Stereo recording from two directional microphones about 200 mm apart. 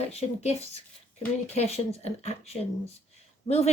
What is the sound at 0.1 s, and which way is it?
A woman's voice, 30° left (ahead or behind).